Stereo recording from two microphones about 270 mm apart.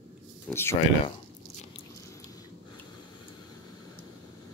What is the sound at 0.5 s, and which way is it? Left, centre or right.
Speech, centre.